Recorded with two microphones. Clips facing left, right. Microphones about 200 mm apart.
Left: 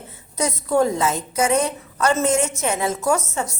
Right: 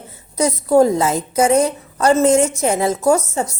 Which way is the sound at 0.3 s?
35° right (ahead or behind).